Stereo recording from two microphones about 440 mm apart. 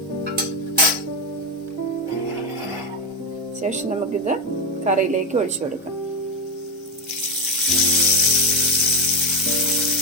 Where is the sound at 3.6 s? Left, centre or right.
Centre.